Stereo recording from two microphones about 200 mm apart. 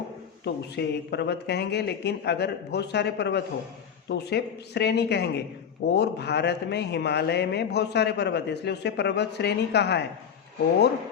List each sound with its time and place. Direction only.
0.4 s a man's voice: 55° left (ahead or behind)